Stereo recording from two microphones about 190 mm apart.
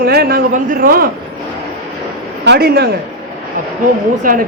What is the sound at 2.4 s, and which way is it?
Speech, 60° right (ahead or behind).